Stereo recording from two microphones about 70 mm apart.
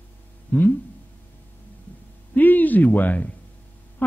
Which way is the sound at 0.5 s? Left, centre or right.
Left.